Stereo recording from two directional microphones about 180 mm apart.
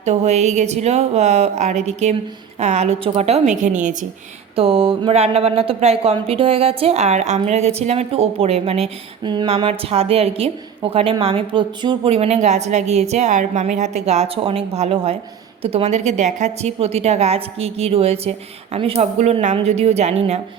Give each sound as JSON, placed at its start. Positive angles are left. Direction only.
{"t": 0.0, "sound": "speech", "side_deg": -40}
{"t": 4.5, "sound": "speech", "side_deg": -30}